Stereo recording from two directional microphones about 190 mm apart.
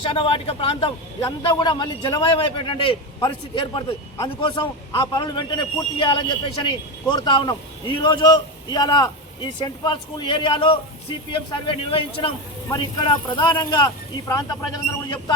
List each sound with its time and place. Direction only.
0.1 s a man's voice: 30° left (ahead or behind)